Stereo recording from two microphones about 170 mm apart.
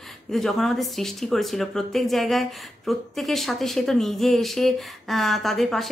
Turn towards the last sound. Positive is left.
turn(degrees=0)  # may be behind; listen again after turning